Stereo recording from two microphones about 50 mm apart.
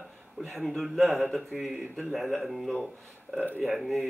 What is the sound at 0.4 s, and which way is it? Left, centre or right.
Speech, centre.